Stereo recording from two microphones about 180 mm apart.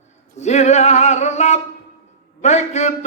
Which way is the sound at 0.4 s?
40° left (ahead or behind).